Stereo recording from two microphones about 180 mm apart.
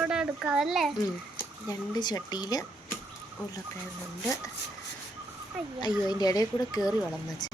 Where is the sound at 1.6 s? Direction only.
20° left (ahead or behind).